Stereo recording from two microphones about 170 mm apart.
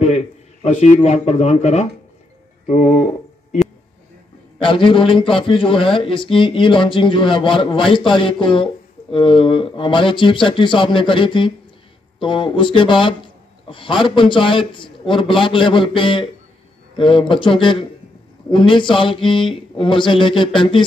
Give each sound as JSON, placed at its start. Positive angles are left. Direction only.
{"t": 0.0, "sound": "speech", "side_deg": 40}
{"t": 2.6, "sound": "a sound", "side_deg": 50}
{"t": 4.6, "sound": "a man's voice", "side_deg": 30}